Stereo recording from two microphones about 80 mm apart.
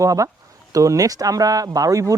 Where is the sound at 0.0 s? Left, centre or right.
Right.